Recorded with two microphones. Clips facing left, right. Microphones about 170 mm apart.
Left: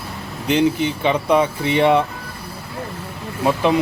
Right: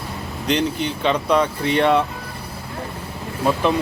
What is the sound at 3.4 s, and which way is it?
Speech, 15° left (ahead or behind).